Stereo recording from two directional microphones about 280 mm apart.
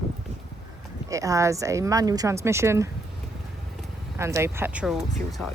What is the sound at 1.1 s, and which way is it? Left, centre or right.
Speech, centre.